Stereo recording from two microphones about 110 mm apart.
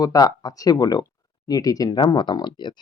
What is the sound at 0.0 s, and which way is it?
Speech, 35° left (ahead or behind).